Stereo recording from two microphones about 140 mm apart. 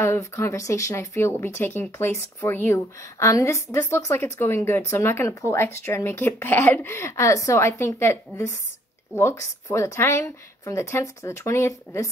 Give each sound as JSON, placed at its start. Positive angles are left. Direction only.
{"t": 0.0, "sound": "speech", "side_deg": 20}